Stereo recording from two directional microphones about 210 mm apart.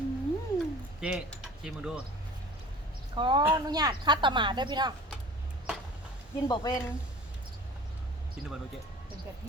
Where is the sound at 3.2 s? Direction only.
20° right (ahead or behind).